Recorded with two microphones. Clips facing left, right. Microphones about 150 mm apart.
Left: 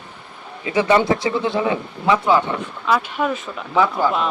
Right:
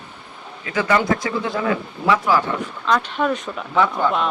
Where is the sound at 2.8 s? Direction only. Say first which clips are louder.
Even; 10° left (ahead or behind).